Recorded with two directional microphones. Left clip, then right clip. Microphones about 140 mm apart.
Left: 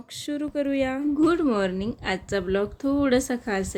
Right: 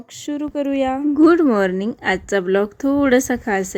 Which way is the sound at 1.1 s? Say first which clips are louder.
Right 9 dB; 45° right (ahead or behind).